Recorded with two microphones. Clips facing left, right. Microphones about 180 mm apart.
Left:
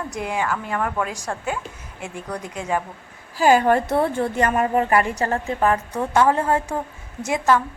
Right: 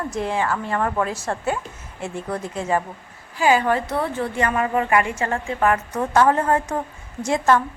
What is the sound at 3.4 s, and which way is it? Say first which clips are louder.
A woman's voice: left 2 dB; 45° left (ahead or behind).